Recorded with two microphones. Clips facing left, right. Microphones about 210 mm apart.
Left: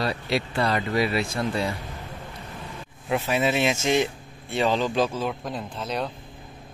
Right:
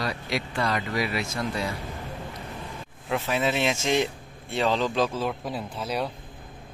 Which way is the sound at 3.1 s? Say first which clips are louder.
Left 2 dB; 10° left (ahead or behind).